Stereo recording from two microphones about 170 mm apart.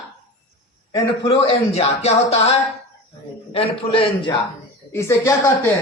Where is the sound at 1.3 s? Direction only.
35° left (ahead or behind).